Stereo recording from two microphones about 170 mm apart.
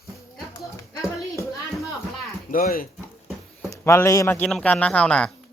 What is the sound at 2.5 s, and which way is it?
Speech, 55° left (ahead or behind).